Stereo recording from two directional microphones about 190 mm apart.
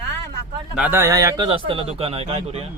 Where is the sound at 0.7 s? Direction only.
10° right (ahead or behind); by 2.6 s 30° right (ahead or behind).